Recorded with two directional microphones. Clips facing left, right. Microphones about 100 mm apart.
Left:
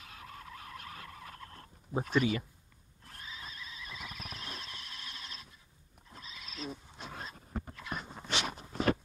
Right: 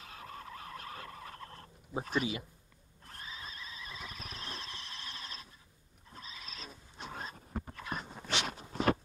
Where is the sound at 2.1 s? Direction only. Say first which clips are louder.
Left 4 dB; 20° right (ahead or behind).